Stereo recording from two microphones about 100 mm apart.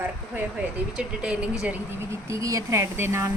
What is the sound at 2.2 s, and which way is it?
Speech, 30° right (ahead or behind).